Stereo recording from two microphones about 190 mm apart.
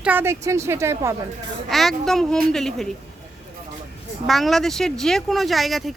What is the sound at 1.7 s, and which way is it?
Speech, centre (ahead or behind).